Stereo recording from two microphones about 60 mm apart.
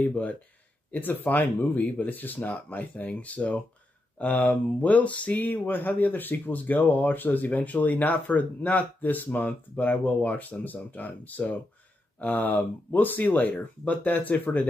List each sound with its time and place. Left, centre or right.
0.1 s speech: left